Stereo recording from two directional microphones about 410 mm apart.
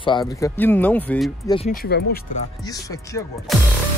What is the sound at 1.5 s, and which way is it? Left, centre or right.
Speech, centre.